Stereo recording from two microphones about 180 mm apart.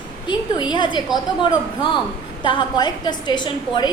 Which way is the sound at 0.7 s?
25° left (ahead or behind).